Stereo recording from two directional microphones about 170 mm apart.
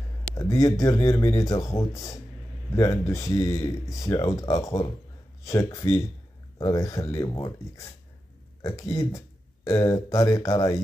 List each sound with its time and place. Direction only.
0.3 s speech: 20° left (ahead or behind)